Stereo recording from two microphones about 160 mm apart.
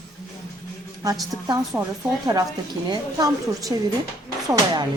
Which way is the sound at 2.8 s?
25° right (ahead or behind).